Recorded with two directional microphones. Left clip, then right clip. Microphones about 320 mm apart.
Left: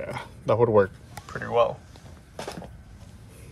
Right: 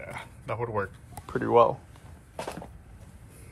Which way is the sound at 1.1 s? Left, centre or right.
Centre.